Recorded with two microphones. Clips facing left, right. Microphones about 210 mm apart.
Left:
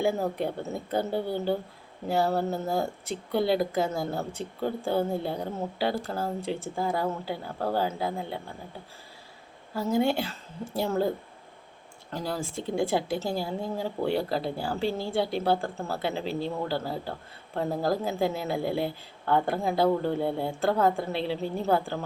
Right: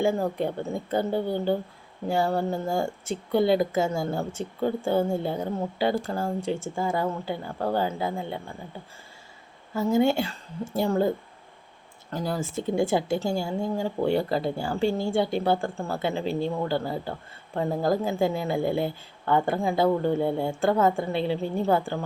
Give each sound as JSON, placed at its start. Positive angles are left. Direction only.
{"t": 0.0, "sound": "a woman's voice", "side_deg": 5}
{"t": 9.8, "sound": "a woman's voice", "side_deg": 0}
{"t": 12.1, "sound": "a woman's voice", "side_deg": 0}
{"t": 14.8, "sound": "a woman's voice", "side_deg": -50}
{"t": 15.1, "sound": "a woman's voice", "side_deg": 0}